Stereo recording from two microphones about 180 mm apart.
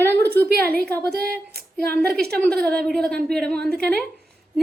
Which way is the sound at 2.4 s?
5° left (ahead or behind).